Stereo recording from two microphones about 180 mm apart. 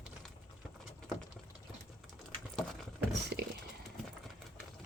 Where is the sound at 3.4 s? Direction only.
65° right (ahead or behind).